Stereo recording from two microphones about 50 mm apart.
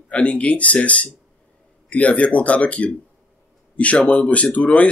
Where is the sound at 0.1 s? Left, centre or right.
Left.